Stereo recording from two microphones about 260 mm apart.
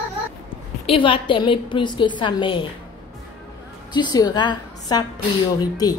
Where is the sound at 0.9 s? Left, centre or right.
Centre.